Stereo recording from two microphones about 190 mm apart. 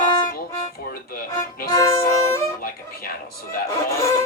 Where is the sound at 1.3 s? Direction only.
20° left (ahead or behind).